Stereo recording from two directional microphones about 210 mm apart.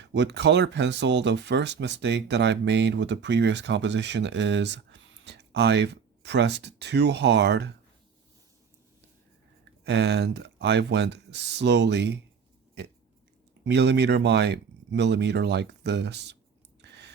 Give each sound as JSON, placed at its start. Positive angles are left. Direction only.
{"t": 0.0, "sound": "speech", "side_deg": -55}
{"t": 9.8, "sound": "speech", "side_deg": -55}
{"t": 13.7, "sound": "speech", "side_deg": -55}
{"t": 16.8, "sound": "a sound", "side_deg": -55}